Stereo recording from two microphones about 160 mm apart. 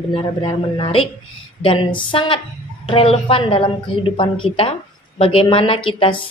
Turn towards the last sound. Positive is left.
turn(degrees=30)  # may be behind; listen again after turning